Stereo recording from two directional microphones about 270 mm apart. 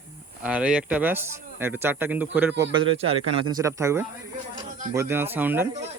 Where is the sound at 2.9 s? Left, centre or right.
Right.